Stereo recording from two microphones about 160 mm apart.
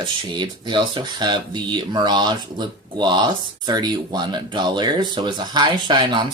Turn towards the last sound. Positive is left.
turn(degrees=-30)  # may be behind; listen again after turning